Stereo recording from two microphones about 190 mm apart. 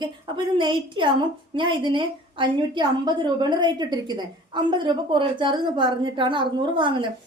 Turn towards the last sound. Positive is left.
turn(degrees=-25)  # may be behind; listen again after turning